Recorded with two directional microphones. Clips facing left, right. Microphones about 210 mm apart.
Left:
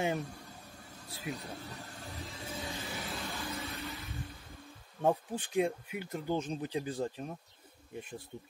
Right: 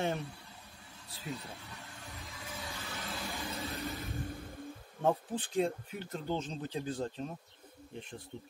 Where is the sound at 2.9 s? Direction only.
Centre (ahead or behind).